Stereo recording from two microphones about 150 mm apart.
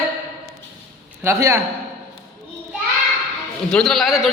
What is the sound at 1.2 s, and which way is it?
Speech, 20° right (ahead or behind).